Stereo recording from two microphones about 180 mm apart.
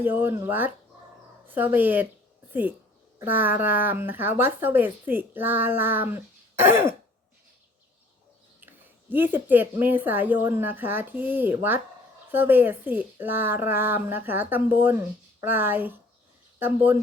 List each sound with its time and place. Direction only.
0.0 s speech: 10° right (ahead or behind)
8.6 s speech: 10° right (ahead or behind)